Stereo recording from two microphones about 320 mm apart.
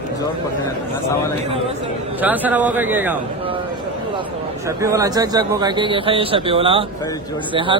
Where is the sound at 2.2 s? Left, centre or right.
Centre.